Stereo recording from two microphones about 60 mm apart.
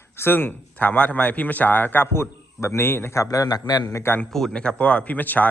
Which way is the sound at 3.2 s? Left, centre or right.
Left.